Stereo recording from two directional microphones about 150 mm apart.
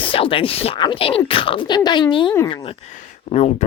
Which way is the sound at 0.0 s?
35° left (ahead or behind).